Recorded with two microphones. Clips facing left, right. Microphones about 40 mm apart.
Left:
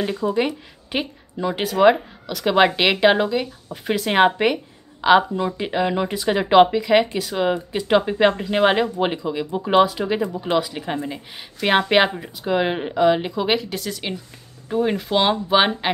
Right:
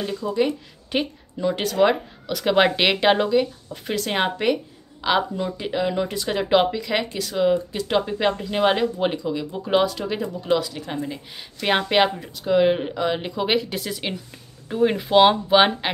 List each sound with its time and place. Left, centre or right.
0.0 s speech: left
0.9 s speech: centre
2.2 s speech: centre